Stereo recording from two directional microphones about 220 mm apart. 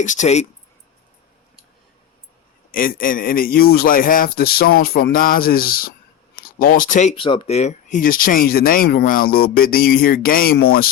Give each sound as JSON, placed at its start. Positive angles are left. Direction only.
{"t": 0.0, "sound": "speech", "side_deg": 35}
{"t": 2.7, "sound": "speech", "side_deg": 40}
{"t": 7.2, "sound": "speech", "side_deg": 25}